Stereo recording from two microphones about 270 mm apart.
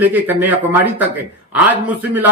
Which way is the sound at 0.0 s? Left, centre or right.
Centre.